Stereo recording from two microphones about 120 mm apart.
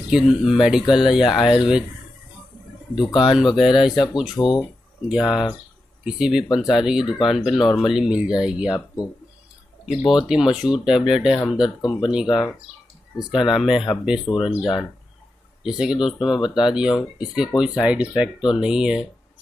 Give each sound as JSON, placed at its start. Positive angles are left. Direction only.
{"t": 0.1, "sound": "speech", "side_deg": -5}
{"t": 3.1, "sound": "speech", "side_deg": 40}
{"t": 3.3, "sound": "speech", "side_deg": -5}
{"t": 4.4, "sound": "speech", "side_deg": 40}
{"t": 5.0, "sound": "speech", "side_deg": -5}
{"t": 15.8, "sound": "speech", "side_deg": -5}